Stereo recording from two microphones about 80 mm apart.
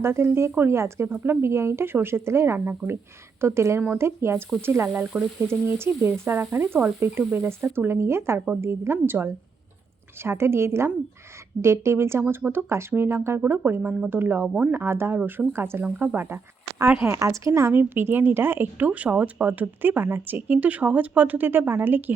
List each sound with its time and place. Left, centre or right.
0.0 s speech: right
5.1 s speech: centre
5.5 s a woman's voice: right
12.2 s speech: centre
12.5 s a woman's voice: right
14.4 s speech: centre
14.7 s a woman's voice: right
17.7 s a woman's voice: right